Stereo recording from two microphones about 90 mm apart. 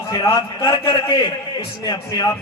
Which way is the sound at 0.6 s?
50° left (ahead or behind).